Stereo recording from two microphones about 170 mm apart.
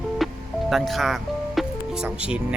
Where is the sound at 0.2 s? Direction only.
Centre (ahead or behind).